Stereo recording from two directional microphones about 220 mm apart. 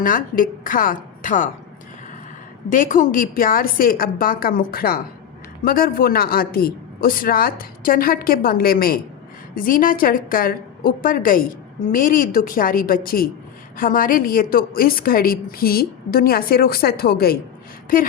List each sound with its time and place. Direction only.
0.0 s a woman's voice: 40° left (ahead or behind)
2.6 s a woman's voice: 35° left (ahead or behind)